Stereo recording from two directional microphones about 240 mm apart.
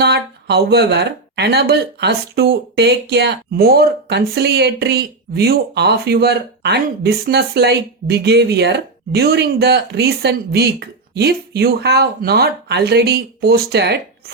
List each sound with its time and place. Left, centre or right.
0.0 s speech: right